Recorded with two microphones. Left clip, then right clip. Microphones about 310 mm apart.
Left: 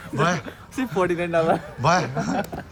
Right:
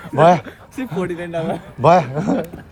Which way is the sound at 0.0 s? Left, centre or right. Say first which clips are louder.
Right 11 dB; centre.